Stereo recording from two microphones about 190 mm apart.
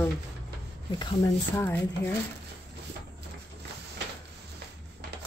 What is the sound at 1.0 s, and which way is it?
Speech, 20° left (ahead or behind).